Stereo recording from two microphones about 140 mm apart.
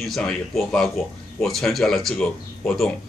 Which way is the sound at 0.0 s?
5° left (ahead or behind).